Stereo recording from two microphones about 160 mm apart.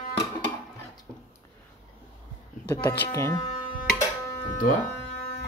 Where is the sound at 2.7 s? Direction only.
20° left (ahead or behind).